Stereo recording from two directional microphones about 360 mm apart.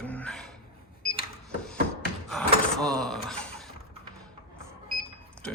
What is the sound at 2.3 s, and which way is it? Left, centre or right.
Speech, centre.